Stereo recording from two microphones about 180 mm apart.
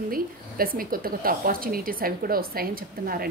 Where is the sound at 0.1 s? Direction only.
55° right (ahead or behind).